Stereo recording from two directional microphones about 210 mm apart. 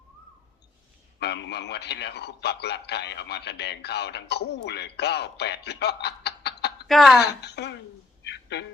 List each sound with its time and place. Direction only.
1.2 s a man's voice: 55° left (ahead or behind)
6.8 s speech: centre (ahead or behind)
7.2 s a man's voice: 50° left (ahead or behind)
8.2 s a sound: 55° left (ahead or behind)